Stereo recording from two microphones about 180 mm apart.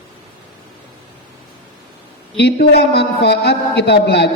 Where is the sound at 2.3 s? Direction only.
65° left (ahead or behind).